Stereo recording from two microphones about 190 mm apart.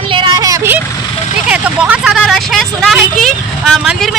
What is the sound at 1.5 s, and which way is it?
A woman's voice, 5° right (ahead or behind).